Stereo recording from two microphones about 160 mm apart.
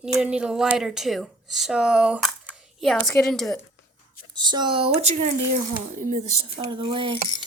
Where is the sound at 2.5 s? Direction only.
Centre (ahead or behind).